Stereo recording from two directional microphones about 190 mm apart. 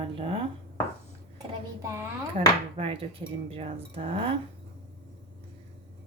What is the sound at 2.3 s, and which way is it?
Speech, 30° right (ahead or behind).